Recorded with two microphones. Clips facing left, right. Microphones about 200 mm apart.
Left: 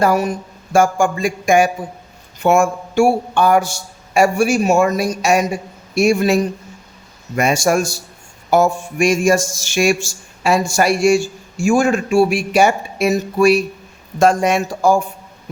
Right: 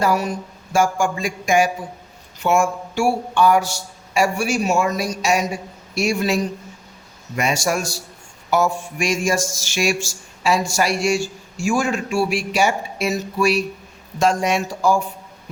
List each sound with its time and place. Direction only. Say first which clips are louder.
0.0 s speech: left 4 dB; 50° left (ahead or behind)